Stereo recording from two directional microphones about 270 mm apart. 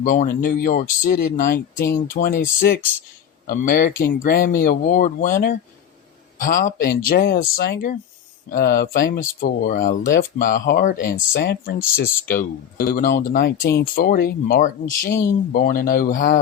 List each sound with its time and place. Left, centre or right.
0.0 s speech: left